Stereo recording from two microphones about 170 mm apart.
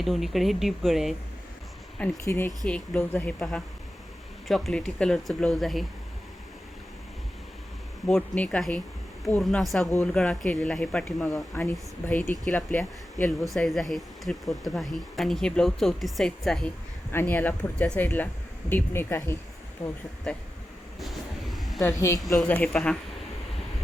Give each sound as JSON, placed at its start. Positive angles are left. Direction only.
{"t": 0.0, "sound": "speech", "side_deg": 0}
{"t": 2.2, "sound": "speech", "side_deg": 15}
{"t": 8.0, "sound": "speech", "side_deg": 5}
{"t": 21.5, "sound": "a sound", "side_deg": 0}
{"t": 21.8, "sound": "speech", "side_deg": 15}
{"t": 22.2, "sound": "speech", "side_deg": 0}